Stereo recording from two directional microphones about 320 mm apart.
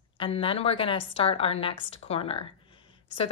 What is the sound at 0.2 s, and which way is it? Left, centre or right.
Speech, centre.